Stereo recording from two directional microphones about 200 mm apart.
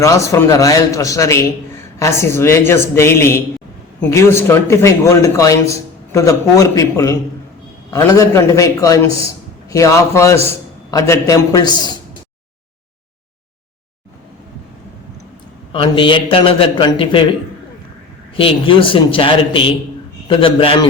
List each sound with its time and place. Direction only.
0.0 s a man's voice: 15° left (ahead or behind)
15.7 s a man's voice: 25° left (ahead or behind)
18.3 s a man's voice: 25° left (ahead or behind)